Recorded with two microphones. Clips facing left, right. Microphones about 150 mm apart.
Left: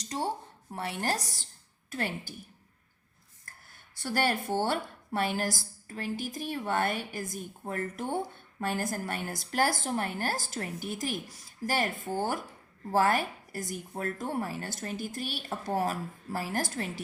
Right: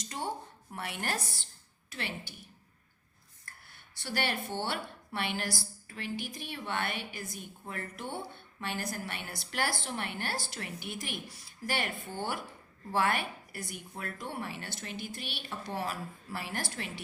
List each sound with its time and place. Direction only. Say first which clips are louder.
0.0 s a sound: left 5 dB; 35° left (ahead or behind)
0.7 s a woman's voice: left 4 dB; 35° left (ahead or behind)
4.0 s a woman's voice: left 5 dB; 45° left (ahead or behind)